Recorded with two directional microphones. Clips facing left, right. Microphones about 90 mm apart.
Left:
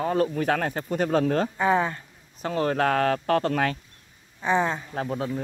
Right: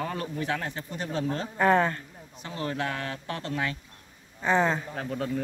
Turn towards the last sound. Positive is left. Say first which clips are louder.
# left 1 dB
turn(degrees=25)  # may be behind; listen again after turning